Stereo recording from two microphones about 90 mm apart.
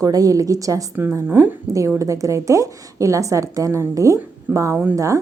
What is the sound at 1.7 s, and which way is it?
A woman's voice, 35° right (ahead or behind).